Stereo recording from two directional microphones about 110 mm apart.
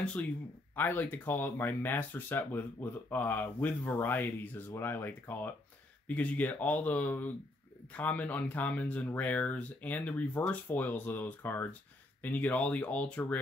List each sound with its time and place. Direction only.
0.0 s speech: 10° left (ahead or behind)